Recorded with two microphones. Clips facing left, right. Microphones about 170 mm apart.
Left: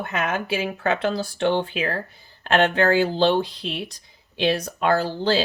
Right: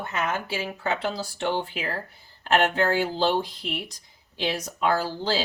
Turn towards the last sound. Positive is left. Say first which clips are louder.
# left 5 dB
turn(degrees=60)  # may be behind; listen again after turning